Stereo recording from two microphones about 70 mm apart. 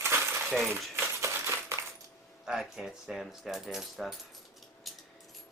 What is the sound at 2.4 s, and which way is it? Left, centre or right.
Speech, centre.